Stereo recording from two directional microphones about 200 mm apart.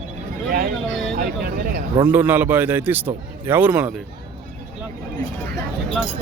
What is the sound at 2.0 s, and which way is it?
A man's voice, 10° right (ahead or behind).